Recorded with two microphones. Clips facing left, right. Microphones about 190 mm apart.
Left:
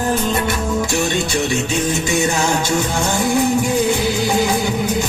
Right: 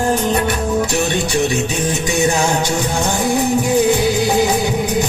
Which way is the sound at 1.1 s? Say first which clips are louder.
Right 2 dB; 15° right (ahead or behind).